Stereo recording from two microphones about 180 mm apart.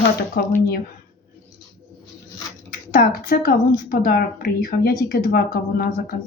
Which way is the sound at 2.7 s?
55° left (ahead or behind).